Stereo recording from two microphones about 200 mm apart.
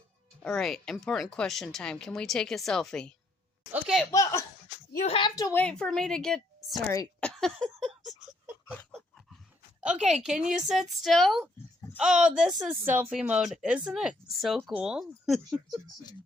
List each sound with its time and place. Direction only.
0.4 s speech: centre (ahead or behind)
3.7 s a sound: centre (ahead or behind)
4.1 s a child's voice: 15° left (ahead or behind)
5.5 s speech: 5° left (ahead or behind)
6.8 s speech: 15° left (ahead or behind)
7.2 s a sound: 5° left (ahead or behind)
10.2 s speech: 5° right (ahead or behind)